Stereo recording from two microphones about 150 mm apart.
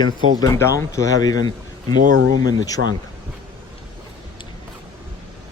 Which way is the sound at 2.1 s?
80° right.